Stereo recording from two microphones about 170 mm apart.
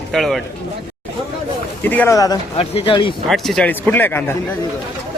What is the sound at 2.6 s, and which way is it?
Speech, 30° left (ahead or behind).